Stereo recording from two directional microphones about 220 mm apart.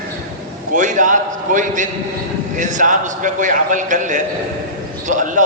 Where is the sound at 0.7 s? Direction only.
35° right (ahead or behind).